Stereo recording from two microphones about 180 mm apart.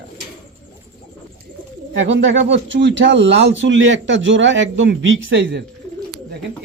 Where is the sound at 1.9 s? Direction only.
90° right.